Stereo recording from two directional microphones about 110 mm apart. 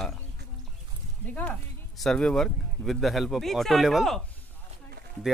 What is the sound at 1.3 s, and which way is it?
Speech, 15° left (ahead or behind).